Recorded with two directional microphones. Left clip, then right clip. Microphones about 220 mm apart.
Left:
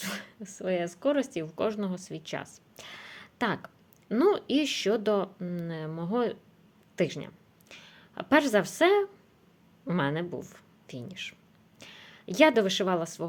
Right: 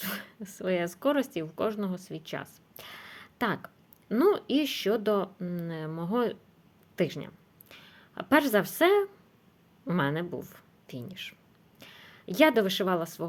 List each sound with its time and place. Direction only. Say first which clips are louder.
0.0 s speech: even; centre (ahead or behind)